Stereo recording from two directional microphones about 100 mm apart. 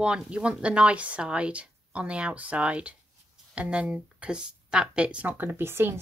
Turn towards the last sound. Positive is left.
turn(degrees=-25)  # may be behind; listen again after turning